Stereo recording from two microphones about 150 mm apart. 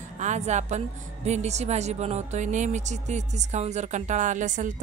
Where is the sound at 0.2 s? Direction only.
50° right (ahead or behind).